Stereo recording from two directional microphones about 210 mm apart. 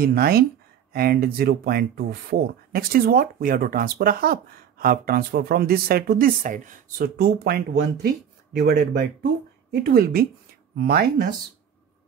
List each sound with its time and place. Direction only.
0.0 s speech: 45° right (ahead or behind)